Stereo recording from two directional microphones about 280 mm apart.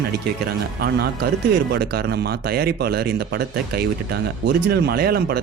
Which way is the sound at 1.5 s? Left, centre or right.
Right.